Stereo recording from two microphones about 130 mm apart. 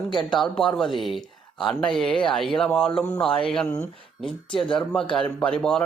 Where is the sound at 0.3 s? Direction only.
Centre (ahead or behind).